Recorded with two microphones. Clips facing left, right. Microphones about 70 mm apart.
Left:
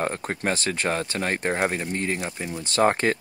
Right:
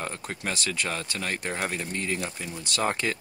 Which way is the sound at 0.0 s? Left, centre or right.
Left.